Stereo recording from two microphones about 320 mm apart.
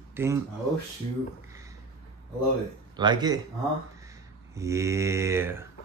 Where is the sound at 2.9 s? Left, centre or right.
Centre.